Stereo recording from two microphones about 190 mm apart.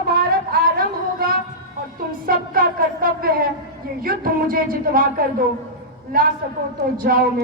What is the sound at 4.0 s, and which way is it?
A woman's voice, 50° right (ahead or behind).